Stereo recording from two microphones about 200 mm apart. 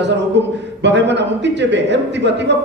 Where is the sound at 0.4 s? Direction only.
60° right (ahead or behind).